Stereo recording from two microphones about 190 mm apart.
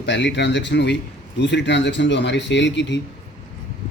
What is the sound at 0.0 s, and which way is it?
Speech, 65° left (ahead or behind).